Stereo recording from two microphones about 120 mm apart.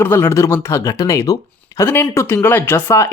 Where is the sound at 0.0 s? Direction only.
20° left (ahead or behind).